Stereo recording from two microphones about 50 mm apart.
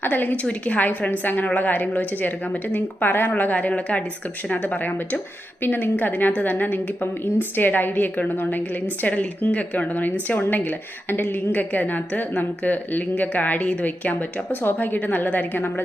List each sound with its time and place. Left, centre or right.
0.0 s a woman's voice: left